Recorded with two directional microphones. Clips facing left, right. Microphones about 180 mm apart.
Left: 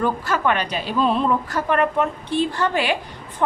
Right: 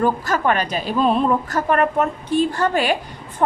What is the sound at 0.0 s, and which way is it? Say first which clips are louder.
A woman's voice: right 2 dB; 45° right (ahead or behind).